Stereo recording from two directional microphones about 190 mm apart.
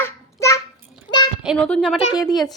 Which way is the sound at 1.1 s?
25° left (ahead or behind).